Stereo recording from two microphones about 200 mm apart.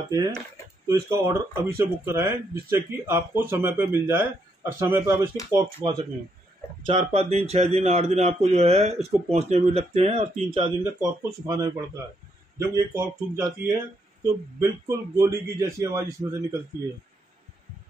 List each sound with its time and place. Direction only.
0.1 s speech: 20° right (ahead or behind)
6.9 s speech: 30° right (ahead or behind)
10.8 s speech: 15° right (ahead or behind)